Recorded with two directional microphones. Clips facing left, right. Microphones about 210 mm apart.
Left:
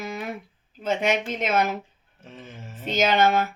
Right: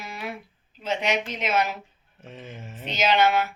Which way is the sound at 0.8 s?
50° left (ahead or behind).